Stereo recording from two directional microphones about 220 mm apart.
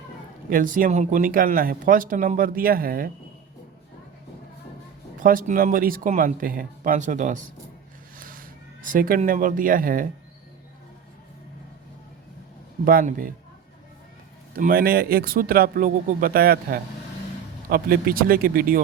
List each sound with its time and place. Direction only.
0.5 s speech: 40° right (ahead or behind)
5.2 s speech: 40° right (ahead or behind)
12.8 s speech: 40° right (ahead or behind)
14.5 s speech: 40° right (ahead or behind)